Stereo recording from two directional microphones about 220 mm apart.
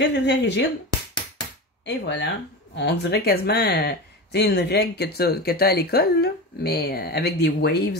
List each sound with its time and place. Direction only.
0.0 s speech: 50° left (ahead or behind)
1.9 s speech: 50° left (ahead or behind)